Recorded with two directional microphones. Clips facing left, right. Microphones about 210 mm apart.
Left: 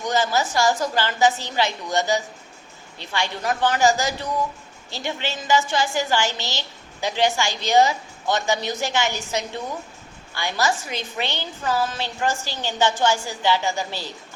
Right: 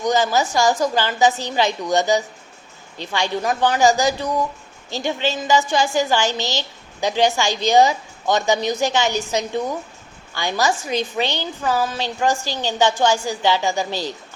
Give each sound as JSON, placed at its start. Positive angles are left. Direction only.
{"t": 0.1, "sound": "a woman's voice", "side_deg": -15}